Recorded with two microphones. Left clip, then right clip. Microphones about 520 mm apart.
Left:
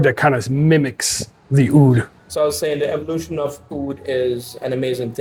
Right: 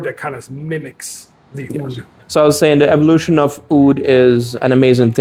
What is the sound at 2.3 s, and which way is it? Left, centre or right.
Speech, right.